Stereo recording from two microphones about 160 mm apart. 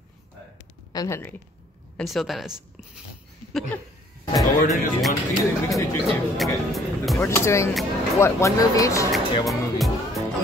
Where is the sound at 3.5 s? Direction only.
5° left (ahead or behind).